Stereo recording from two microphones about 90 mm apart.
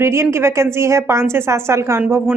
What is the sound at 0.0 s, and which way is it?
A woman's voice, 30° right (ahead or behind).